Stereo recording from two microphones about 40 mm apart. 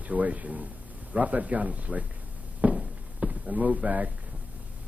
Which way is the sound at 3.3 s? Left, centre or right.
Right.